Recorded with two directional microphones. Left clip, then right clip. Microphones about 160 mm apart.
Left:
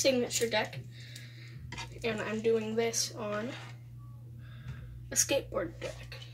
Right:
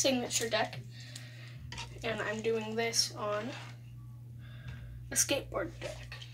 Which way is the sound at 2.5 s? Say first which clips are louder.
Left 1 dB; 30° right (ahead or behind).